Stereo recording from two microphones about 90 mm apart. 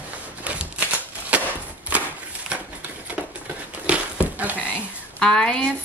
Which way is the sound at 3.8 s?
15° right (ahead or behind).